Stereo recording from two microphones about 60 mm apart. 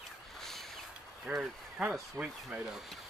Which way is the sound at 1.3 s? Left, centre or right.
Right.